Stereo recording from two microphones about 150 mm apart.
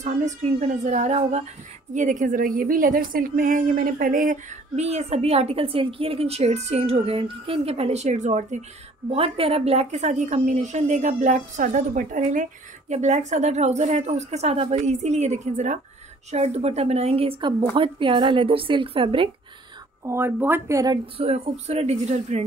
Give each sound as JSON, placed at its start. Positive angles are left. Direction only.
{"t": 0.0, "sound": "a woman's voice", "side_deg": -50}
{"t": 4.7, "sound": "a woman's voice", "side_deg": -45}
{"t": 9.1, "sound": "a woman's voice", "side_deg": -40}
{"t": 20.1, "sound": "speech", "side_deg": -15}
{"t": 21.2, "sound": "a woman's voice", "side_deg": -40}